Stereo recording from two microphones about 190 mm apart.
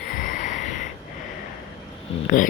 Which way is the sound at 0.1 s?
45° left (ahead or behind).